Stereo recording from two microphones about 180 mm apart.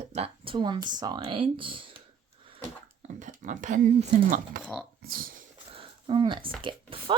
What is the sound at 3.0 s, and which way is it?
Speech, 45° right (ahead or behind).